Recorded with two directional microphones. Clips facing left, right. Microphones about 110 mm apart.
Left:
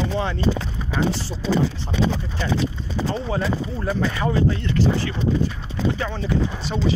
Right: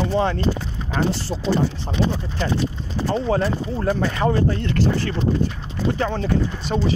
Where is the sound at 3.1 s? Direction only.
40° right (ahead or behind).